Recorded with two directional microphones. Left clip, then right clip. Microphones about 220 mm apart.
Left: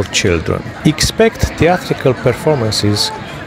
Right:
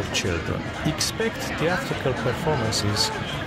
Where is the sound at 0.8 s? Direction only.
35° left (ahead or behind).